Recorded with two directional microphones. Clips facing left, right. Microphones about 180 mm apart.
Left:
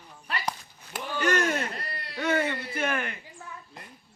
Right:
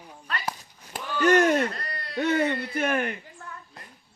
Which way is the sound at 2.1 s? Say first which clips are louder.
Right 3 dB; 45° right (ahead or behind).